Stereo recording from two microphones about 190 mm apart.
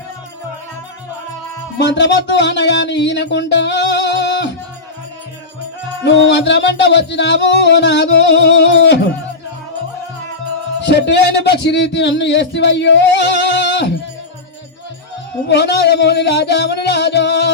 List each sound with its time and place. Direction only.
1.8 s speech: 65° left (ahead or behind)
6.0 s speech: 70° left (ahead or behind)
10.8 s speech: 65° left (ahead or behind)
15.4 s music: 60° left (ahead or behind)